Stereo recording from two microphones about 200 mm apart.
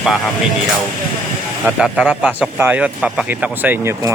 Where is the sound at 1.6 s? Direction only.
5° right (ahead or behind).